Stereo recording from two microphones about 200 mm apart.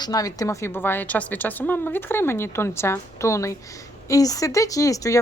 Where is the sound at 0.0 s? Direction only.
20° left (ahead or behind).